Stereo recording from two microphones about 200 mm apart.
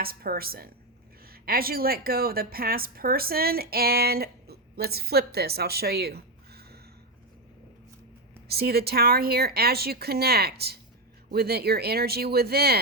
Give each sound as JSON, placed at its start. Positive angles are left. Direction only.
{"t": 0.0, "sound": "a woman's voice", "side_deg": -50}
{"t": 8.4, "sound": "speech", "side_deg": -50}